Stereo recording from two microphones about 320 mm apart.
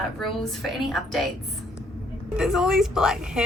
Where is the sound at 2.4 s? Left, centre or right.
Centre.